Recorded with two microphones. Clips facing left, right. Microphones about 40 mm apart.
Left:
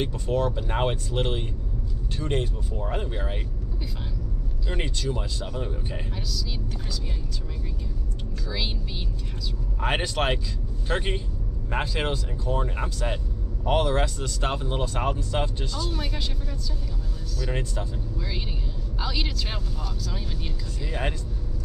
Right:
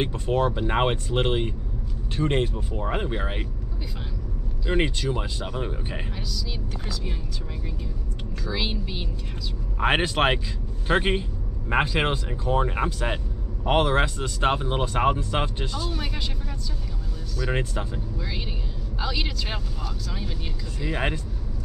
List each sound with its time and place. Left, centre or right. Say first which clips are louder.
0.0 s speech: right 2 dB; right
4.6 s speech: right 5 dB; right
8.5 s speech: right 3 dB; right
15.9 s speech: even; centre
17.4 s speech: right 3 dB; right
18.9 s speech: right 1 dB; centre